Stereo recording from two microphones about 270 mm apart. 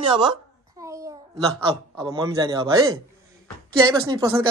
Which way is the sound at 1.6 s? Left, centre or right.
Centre.